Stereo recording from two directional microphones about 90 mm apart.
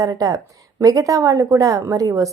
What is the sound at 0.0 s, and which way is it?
A woman's voice, 40° right (ahead or behind).